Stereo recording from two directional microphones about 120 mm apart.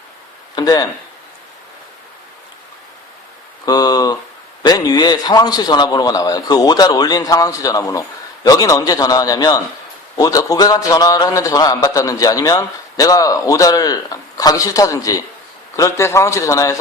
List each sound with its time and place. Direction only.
0.5 s a man's voice: 30° left (ahead or behind)
3.7 s a man's voice: 35° left (ahead or behind)